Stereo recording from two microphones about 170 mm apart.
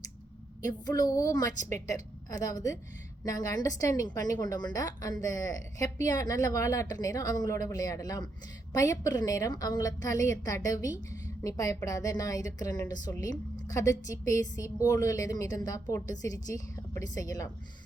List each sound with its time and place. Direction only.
0.7 s a woman's voice: 20° left (ahead or behind)